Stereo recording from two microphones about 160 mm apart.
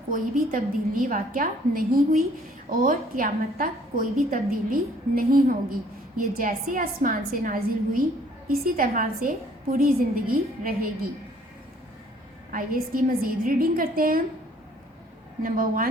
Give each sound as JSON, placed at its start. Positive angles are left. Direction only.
{"t": 0.1, "sound": "a woman's voice", "side_deg": -60}
{"t": 12.5, "sound": "a woman's voice", "side_deg": -60}
{"t": 15.4, "sound": "a woman's voice", "side_deg": -60}